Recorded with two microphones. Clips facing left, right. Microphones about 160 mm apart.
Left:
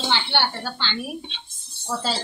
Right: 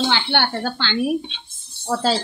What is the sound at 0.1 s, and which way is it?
Speech, 55° right (ahead or behind).